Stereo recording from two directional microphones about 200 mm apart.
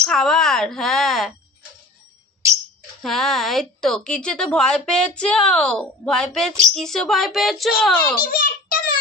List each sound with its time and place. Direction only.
0.0 s speech: 5° left (ahead or behind)
3.0 s a woman's voice: centre (ahead or behind)
8.2 s a sound: 45° left (ahead or behind)